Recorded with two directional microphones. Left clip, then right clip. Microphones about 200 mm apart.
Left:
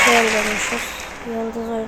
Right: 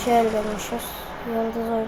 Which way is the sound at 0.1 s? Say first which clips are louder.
Left 4 dB; 5° left (ahead or behind).